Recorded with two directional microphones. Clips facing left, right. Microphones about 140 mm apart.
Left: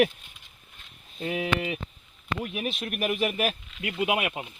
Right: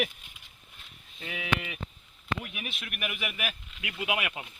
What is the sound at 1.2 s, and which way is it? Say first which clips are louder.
Speech: left 5 dB; 35° left (ahead or behind).